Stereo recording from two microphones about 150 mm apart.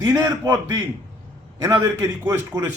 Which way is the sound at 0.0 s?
25° right (ahead or behind).